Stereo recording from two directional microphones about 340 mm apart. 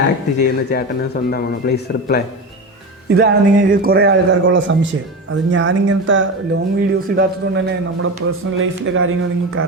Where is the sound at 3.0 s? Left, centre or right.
Right.